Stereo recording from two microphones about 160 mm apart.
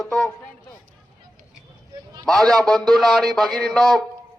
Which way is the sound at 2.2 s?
Centre (ahead or behind).